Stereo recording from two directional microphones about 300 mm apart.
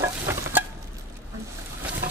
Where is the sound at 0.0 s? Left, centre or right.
Centre.